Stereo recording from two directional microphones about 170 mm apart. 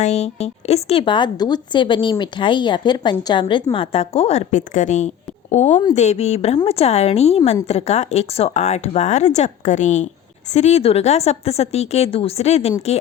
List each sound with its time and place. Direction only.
0.0 s a woman's voice: 40° left (ahead or behind)